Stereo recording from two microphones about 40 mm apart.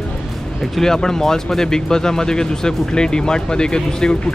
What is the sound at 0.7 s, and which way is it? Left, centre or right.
Speech, centre.